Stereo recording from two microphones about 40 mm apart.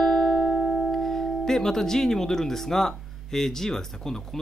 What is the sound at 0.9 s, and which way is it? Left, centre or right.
Speech, centre.